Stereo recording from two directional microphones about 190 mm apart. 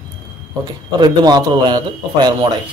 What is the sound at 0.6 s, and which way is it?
A man's voice, 20° right (ahead or behind).